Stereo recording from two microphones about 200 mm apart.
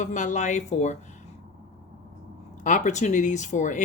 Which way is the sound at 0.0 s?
35° left (ahead or behind).